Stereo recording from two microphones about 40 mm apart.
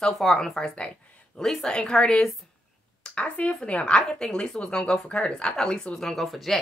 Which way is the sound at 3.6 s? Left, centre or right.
Left.